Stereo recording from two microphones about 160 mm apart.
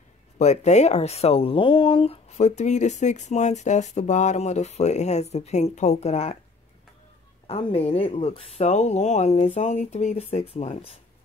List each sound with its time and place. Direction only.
0.4 s speech: 45° left (ahead or behind)
7.4 s speech: 40° left (ahead or behind)